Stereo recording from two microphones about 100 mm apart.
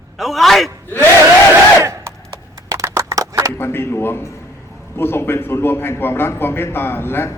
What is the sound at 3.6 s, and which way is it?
A man's voice, 25° left (ahead or behind).